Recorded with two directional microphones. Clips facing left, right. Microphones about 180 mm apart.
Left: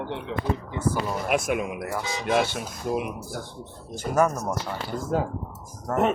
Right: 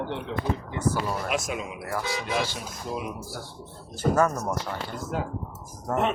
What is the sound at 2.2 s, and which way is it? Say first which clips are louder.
Speech: left 5 dB; 55° left (ahead or behind).